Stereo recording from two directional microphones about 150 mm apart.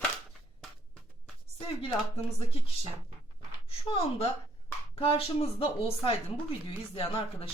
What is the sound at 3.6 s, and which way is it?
Speech, 40° left (ahead or behind).